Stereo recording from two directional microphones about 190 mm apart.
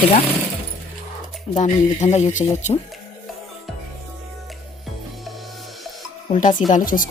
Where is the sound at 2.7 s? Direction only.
30° left (ahead or behind).